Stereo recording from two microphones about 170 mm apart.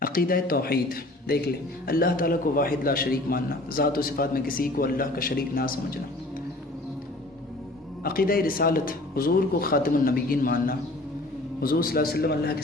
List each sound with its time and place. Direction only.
0.0 s a man's voice: 55° left (ahead or behind)
8.0 s a man's voice: 60° left (ahead or behind)